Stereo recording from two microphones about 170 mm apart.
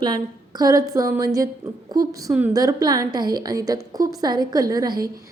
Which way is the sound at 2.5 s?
20° right (ahead or behind).